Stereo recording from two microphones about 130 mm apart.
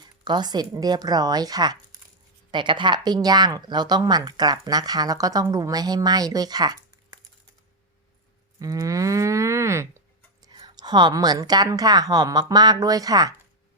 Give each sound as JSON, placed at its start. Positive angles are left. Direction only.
{"t": 0.3, "sound": "speech", "side_deg": -35}
{"t": 8.5, "sound": "moo", "side_deg": -25}
{"t": 10.4, "sound": "a woman's voice", "side_deg": -30}